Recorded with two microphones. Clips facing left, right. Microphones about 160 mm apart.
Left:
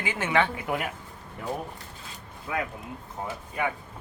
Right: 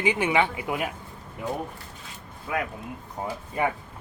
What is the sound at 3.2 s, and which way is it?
Speech, 20° right (ahead or behind).